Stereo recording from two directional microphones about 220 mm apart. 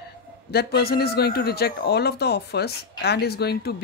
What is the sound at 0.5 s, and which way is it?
Speech, 45° left (ahead or behind).